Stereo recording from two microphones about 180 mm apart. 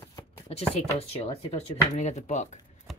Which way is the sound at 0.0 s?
15° left (ahead or behind).